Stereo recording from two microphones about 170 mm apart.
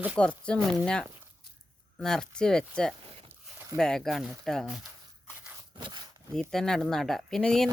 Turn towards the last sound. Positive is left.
turn(degrees=5)  # may be behind; listen again after turning